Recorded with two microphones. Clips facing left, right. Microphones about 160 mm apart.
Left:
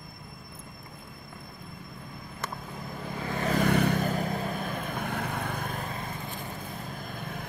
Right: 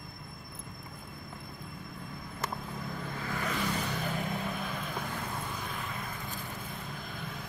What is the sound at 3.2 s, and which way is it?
Vehicle, 25° left (ahead or behind).